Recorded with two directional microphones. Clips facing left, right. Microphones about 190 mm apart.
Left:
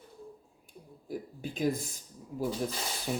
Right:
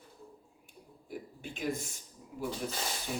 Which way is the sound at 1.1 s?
35° left (ahead or behind).